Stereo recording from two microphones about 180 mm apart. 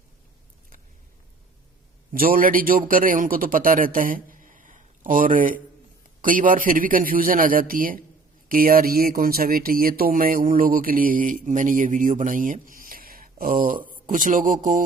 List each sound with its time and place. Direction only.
2.1 s a man's voice: 50° right (ahead or behind)